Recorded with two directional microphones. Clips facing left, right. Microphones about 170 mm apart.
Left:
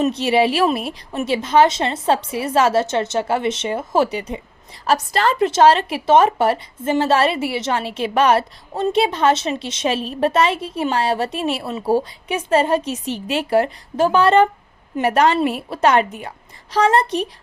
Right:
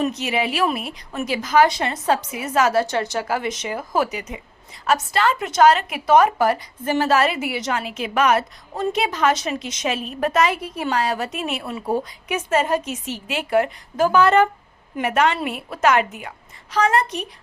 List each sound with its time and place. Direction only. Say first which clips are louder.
0.0 s a woman's voice: left 6 dB; 30° left (ahead or behind)